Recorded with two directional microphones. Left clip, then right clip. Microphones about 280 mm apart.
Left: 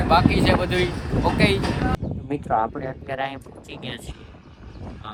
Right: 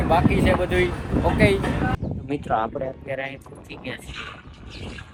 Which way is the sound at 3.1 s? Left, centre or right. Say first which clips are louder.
Left 2 dB; centre.